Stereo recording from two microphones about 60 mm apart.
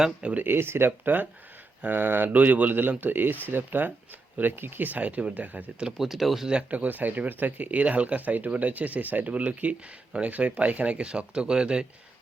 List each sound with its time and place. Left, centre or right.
0.0 s speech: centre
0.4 s speech: right
6.0 s speech: centre
6.5 s speech: right